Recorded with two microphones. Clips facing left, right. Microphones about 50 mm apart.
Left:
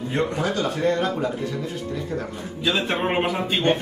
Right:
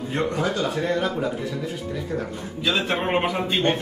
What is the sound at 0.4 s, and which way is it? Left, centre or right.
A man's voice, centre.